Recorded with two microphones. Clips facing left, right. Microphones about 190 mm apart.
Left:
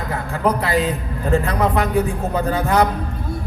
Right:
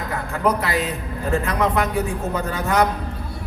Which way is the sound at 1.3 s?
35° left (ahead or behind).